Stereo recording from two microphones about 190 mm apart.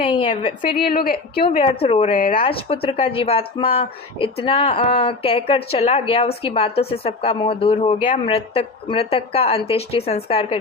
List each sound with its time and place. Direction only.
0.0 s speech: 25° left (ahead or behind)
0.7 s a woman's voice: 50° left (ahead or behind)
1.5 s a woman's voice: 30° left (ahead or behind); by 2.4 s 45° left (ahead or behind)
2.4 s speech: 30° left (ahead or behind)